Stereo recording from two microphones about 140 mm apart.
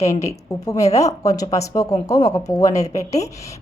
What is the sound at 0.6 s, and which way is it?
Speech, 20° left (ahead or behind).